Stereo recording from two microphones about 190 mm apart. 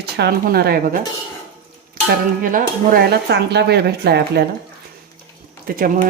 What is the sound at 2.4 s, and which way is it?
Speech, 45° right (ahead or behind).